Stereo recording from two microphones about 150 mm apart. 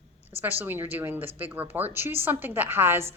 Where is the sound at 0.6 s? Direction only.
15° right (ahead or behind).